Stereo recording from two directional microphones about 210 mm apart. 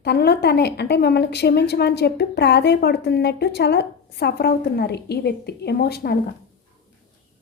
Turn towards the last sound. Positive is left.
turn(degrees=50)  # may be behind; listen again after turning